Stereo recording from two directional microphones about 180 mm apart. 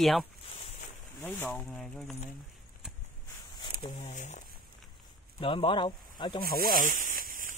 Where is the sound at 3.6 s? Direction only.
25° left (ahead or behind).